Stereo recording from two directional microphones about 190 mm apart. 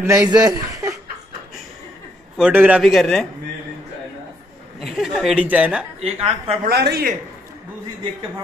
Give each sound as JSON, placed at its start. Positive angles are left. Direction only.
{"t": 0.0, "sound": "speech", "side_deg": -15}
{"t": 2.3, "sound": "a man's voice", "side_deg": -5}
{"t": 4.7, "sound": "a woman's voice", "side_deg": 0}
{"t": 6.2, "sound": "a woman's voice", "side_deg": -30}
{"t": 6.6, "sound": "speech", "side_deg": -55}